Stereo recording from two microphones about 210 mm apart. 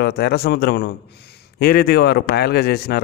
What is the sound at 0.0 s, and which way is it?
A man's voice, 50° left (ahead or behind).